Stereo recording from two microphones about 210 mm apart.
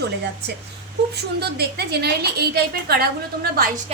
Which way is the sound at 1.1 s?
50° right (ahead or behind).